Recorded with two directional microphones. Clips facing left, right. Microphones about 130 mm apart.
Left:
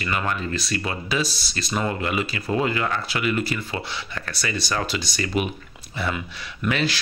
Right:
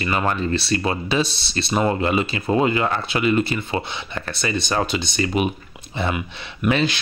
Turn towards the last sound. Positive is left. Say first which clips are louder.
# right 4 dB
turn(degrees=-25)  # may be behind; listen again after turning